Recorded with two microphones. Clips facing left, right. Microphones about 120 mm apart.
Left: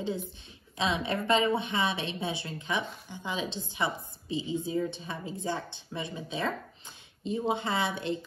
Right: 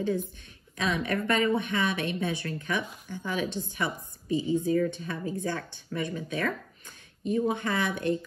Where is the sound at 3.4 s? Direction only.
50° right (ahead or behind).